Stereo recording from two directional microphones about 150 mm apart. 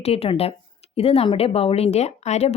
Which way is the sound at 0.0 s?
40° left (ahead or behind).